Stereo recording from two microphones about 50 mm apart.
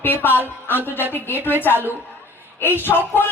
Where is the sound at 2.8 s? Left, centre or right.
Left.